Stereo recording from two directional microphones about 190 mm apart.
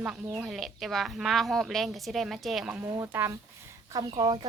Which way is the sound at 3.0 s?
10° right (ahead or behind).